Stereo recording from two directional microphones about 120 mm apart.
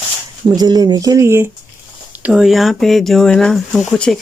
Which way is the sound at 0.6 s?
35° right (ahead or behind).